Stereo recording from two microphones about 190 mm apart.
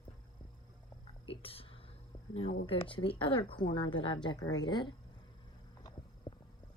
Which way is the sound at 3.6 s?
90° left.